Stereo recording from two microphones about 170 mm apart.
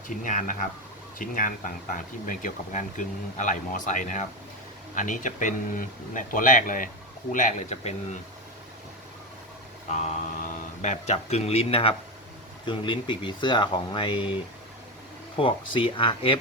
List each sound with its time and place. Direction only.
0.2 s speech: 50° left (ahead or behind)
9.9 s speech: 45° left (ahead or behind)